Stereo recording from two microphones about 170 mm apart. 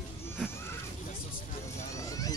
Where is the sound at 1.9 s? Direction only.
20° left (ahead or behind).